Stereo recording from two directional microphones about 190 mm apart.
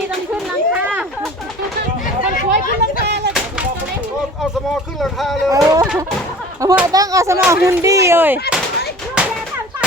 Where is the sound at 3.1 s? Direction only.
65° right (ahead or behind).